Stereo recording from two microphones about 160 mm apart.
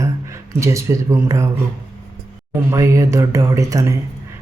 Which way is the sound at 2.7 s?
20° right (ahead or behind).